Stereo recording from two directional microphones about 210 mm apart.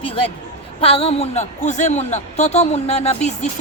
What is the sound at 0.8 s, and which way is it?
A woman's voice, 25° left (ahead or behind).